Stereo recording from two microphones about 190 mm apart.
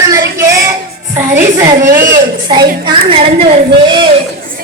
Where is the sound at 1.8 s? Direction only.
45° right (ahead or behind).